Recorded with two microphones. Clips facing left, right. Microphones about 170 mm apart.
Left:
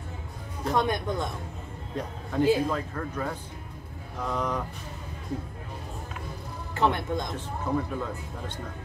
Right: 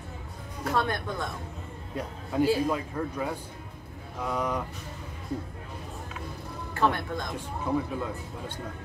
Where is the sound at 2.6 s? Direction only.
10° right (ahead or behind).